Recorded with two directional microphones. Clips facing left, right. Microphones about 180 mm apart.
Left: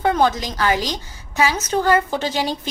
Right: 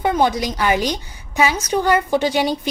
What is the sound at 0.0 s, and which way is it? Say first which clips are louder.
Speech: even; 15° right (ahead or behind).